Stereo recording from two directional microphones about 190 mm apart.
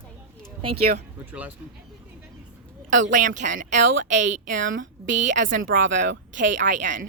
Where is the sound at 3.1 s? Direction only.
40° right (ahead or behind).